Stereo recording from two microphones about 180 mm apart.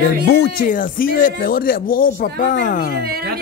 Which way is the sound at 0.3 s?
65° left (ahead or behind).